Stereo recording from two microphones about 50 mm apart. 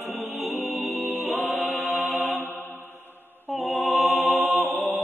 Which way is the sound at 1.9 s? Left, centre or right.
Right.